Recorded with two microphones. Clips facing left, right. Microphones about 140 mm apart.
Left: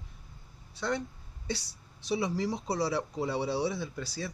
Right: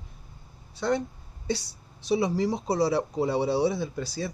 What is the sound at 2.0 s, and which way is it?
Speech, 30° right (ahead or behind).